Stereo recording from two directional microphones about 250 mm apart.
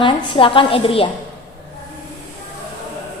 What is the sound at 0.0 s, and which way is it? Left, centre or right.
A woman's voice, left.